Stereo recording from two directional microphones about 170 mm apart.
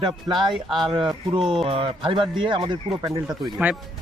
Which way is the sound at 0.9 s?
30° right (ahead or behind).